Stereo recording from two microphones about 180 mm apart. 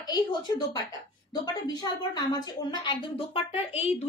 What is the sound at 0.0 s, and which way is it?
A child's voice, 25° left (ahead or behind).